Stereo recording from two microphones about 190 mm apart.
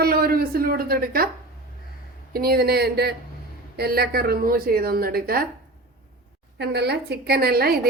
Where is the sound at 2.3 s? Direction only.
55° right (ahead or behind).